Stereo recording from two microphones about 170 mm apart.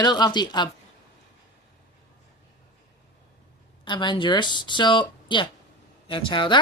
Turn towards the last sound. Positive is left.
turn(degrees=30)  # may be behind; listen again after turning